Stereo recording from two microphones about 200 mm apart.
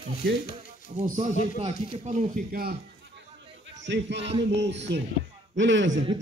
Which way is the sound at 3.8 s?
60° right (ahead or behind).